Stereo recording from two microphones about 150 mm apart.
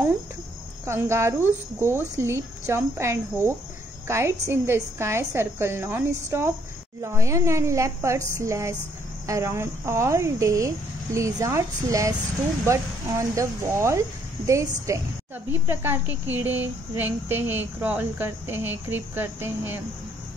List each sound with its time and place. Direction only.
0.8 s speech: 15° right (ahead or behind)